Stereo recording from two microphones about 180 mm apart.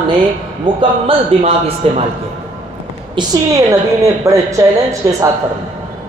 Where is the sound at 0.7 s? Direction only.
30° right (ahead or behind).